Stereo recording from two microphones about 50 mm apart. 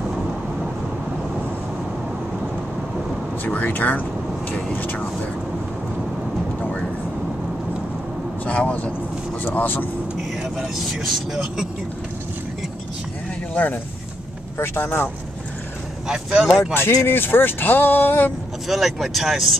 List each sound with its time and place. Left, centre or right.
3.4 s speech: left
8.5 s speech: left
9.4 s speech: left
10.8 s speech: centre
14.6 s speech: left
16.1 s speech: centre
16.5 s speech: left
18.7 s speech: centre